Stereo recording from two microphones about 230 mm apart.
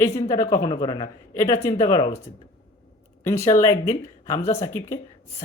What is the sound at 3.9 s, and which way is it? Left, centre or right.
Speech, left.